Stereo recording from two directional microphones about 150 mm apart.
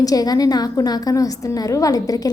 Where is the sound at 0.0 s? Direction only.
25° left (ahead or behind).